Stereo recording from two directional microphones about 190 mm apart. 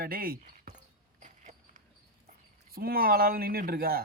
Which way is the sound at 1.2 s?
40° right (ahead or behind).